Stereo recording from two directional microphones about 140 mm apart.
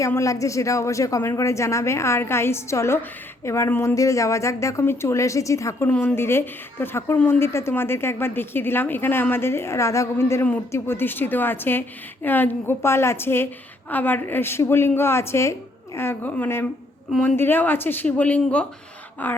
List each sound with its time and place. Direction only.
0.0 s a woman's voice: 20° left (ahead or behind)